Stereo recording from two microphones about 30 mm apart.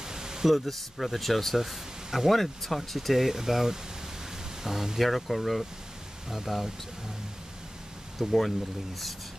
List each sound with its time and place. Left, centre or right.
0.0 s pink noise: centre
0.5 s speech: centre
2.3 s speech: centre
5.0 s speech: centre
6.3 s speech: centre
8.2 s speech: centre